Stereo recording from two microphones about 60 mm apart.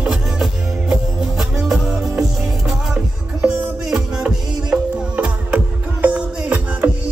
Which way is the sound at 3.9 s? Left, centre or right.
Centre.